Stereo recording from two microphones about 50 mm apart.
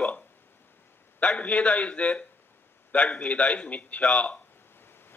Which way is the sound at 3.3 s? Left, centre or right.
Left.